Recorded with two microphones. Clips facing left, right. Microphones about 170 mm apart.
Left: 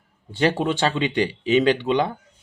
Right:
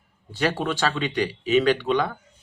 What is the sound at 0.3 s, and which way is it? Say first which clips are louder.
Speech: left 4 dB; 25° left (ahead or behind).